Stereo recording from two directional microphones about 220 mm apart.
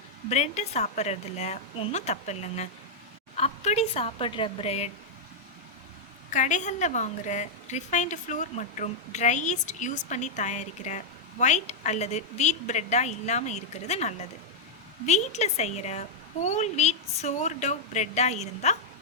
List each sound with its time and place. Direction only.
0.3 s a woman's voice: 30° left (ahead or behind)
6.3 s a woman's voice: 35° left (ahead or behind)